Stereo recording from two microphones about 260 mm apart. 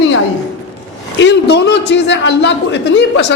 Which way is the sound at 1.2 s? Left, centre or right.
Left.